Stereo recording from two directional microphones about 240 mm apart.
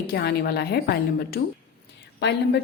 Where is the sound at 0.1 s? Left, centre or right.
Left.